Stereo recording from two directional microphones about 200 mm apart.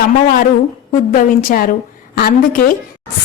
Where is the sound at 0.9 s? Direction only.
40° left (ahead or behind).